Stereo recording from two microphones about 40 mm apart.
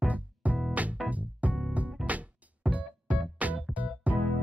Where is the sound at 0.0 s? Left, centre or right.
Right.